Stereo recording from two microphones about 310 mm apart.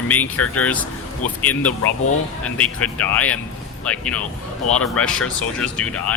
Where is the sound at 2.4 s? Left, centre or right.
Centre.